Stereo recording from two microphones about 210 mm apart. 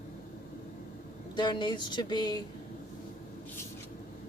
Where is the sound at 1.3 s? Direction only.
20° left (ahead or behind).